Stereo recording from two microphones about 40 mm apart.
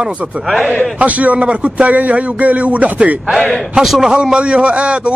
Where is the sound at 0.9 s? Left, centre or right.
Right.